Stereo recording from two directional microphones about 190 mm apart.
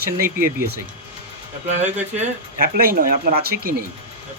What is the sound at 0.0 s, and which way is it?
Speech, 50° right (ahead or behind).